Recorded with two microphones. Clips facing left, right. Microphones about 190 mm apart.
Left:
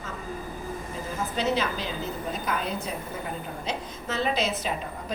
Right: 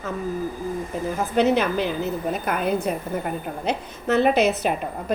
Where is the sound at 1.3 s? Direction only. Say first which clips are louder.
Right 8 dB; 60° right (ahead or behind).